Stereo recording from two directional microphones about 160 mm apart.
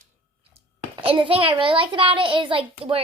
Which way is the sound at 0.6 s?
35° right (ahead or behind).